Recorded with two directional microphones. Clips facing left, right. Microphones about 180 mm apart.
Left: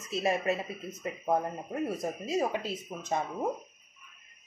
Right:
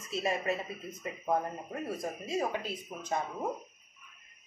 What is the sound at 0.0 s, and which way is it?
Speech, 25° left (ahead or behind).